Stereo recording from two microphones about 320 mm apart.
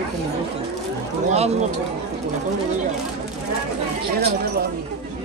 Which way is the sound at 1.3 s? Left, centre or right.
Right.